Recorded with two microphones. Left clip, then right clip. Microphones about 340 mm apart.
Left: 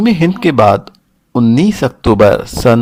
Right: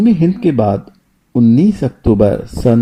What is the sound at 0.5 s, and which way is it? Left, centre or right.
Speech, left.